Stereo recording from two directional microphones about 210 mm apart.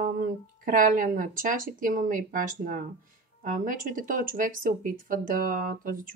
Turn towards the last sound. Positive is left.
turn(degrees=-40)  # may be behind; listen again after turning